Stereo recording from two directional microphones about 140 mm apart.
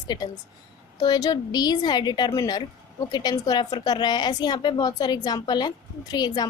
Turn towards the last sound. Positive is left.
turn(degrees=30)  # may be behind; listen again after turning